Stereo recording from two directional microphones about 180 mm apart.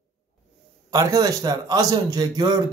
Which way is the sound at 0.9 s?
20° right (ahead or behind).